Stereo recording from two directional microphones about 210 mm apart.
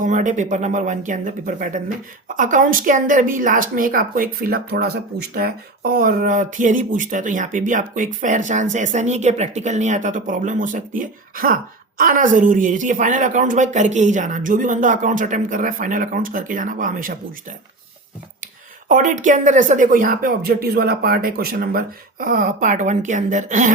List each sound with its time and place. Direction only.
0.0 s speech: 35° right (ahead or behind)
18.9 s speech: 40° right (ahead or behind)